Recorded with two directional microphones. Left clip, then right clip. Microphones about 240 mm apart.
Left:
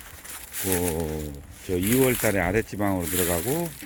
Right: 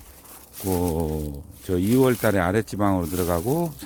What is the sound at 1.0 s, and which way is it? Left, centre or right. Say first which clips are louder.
Speech: right 3 dB; right.